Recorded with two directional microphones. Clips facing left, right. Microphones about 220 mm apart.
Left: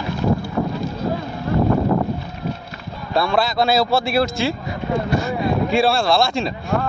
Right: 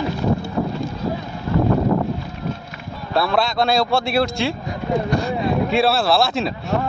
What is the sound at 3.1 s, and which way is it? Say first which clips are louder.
A man's voice: even; centre (ahead or behind).